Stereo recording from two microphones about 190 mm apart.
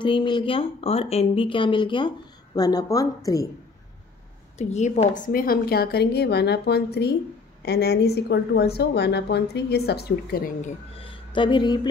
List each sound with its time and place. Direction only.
0.0 s speech: 25° left (ahead or behind)
4.6 s a woman's voice: 35° left (ahead or behind); by 10.5 s 55° left (ahead or behind)
11.0 s a sound: 25° left (ahead or behind)